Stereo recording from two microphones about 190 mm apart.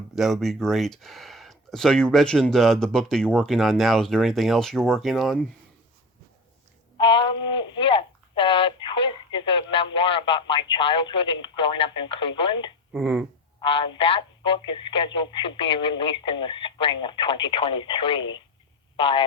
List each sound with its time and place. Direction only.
0.2 s speech: centre (ahead or behind)
6.9 s a sound: 25° left (ahead or behind)
10.7 s speech: 25° left (ahead or behind)
12.9 s speech: centre (ahead or behind)
13.6 s speech: 25° left (ahead or behind)